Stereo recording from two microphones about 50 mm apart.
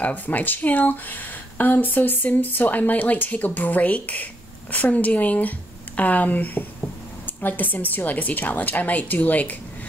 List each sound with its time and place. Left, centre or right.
0.0 s speech: left